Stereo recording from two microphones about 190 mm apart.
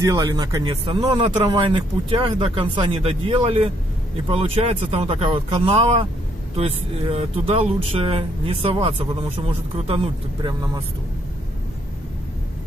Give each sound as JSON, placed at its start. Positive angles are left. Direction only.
{"t": 0.0, "sound": "speech", "side_deg": -20}